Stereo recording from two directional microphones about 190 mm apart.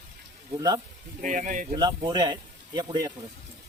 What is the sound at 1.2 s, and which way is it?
Speech, 40° right (ahead or behind).